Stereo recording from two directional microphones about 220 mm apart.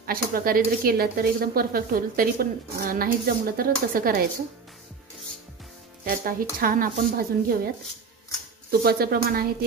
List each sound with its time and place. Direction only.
0.0 s speech: 40° right (ahead or behind)
6.0 s speech: 40° right (ahead or behind)
8.8 s a woman's voice: 45° right (ahead or behind)